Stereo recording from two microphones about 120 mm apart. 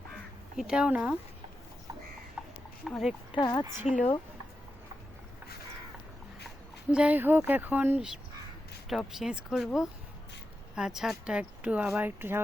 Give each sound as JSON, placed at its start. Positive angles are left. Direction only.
{"t": 0.5, "sound": "speech", "side_deg": -5}
{"t": 2.4, "sound": "a sound", "side_deg": -10}
{"t": 2.8, "sound": "speech", "side_deg": -5}
{"t": 3.3, "sound": "a woman's voice", "side_deg": 40}
{"t": 6.9, "sound": "speech", "side_deg": -10}